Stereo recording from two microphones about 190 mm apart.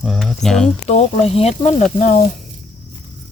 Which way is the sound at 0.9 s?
35° left (ahead or behind).